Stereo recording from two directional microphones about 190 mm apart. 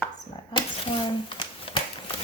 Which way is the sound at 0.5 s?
25° left (ahead or behind).